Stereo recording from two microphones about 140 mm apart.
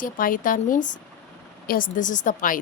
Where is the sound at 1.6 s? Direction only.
85° left.